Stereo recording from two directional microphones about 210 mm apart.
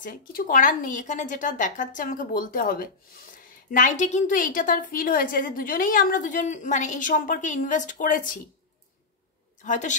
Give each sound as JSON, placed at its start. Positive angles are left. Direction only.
{"t": 0.0, "sound": "a woman's voice", "side_deg": 40}
{"t": 9.6, "sound": "a woman's voice", "side_deg": 35}